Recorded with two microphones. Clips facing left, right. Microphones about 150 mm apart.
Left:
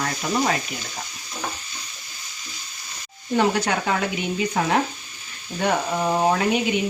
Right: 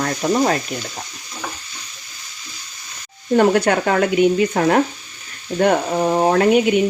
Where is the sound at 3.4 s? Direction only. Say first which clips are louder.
Right 6 dB; 55° right (ahead or behind).